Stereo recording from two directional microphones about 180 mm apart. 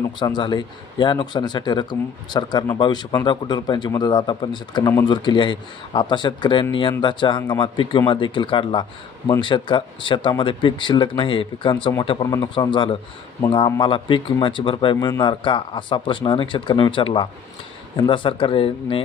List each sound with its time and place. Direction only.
0.2 s speech: 25° left (ahead or behind)